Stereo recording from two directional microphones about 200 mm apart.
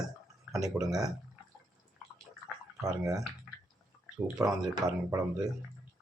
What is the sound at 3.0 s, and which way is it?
Speech, 20° right (ahead or behind).